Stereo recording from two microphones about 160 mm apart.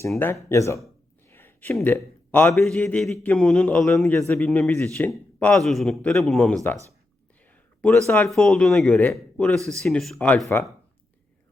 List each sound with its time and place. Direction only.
0.4 s speech: 15° left (ahead or behind)
1.3 s a sound: 15° left (ahead or behind)
2.3 s a man's voice: 5° left (ahead or behind)
7.8 s a man's voice: 10° left (ahead or behind)